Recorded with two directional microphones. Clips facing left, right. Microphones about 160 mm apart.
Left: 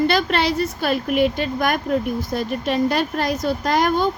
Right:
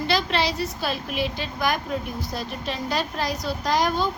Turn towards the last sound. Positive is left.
turn(degrees=55)  # may be behind; listen again after turning